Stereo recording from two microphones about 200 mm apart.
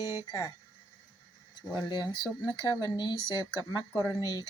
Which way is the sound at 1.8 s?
20° left (ahead or behind).